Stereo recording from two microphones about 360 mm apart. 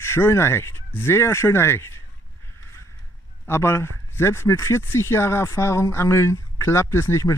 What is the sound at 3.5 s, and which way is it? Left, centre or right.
Speech, centre.